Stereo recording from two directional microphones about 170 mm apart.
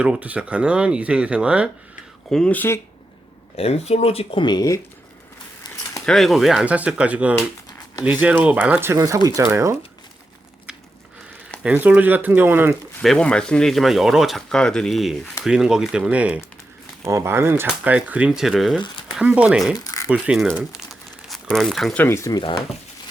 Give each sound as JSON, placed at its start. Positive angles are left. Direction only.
{"t": 0.0, "sound": "speech", "side_deg": -5}
{"t": 2.3, "sound": "speech", "side_deg": 5}
{"t": 3.6, "sound": "speech", "side_deg": 40}
{"t": 6.1, "sound": "speech", "side_deg": 0}
{"t": 11.6, "sound": "speech", "side_deg": -5}
{"t": 13.0, "sound": "speech", "side_deg": 5}
{"t": 19.7, "sound": "a sound", "side_deg": 20}
{"t": 20.1, "sound": "speech", "side_deg": -5}
{"t": 22.0, "sound": "speech", "side_deg": 15}